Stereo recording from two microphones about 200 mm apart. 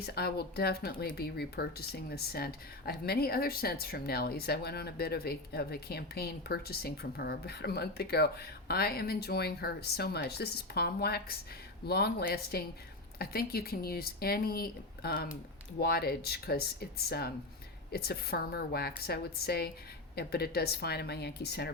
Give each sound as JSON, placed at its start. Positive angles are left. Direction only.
{"t": 0.0, "sound": "speech", "side_deg": 50}